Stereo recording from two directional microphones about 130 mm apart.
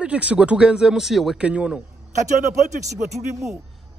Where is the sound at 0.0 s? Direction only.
10° right (ahead or behind).